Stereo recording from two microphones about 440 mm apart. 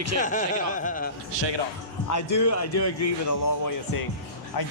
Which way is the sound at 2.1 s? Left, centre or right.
Left.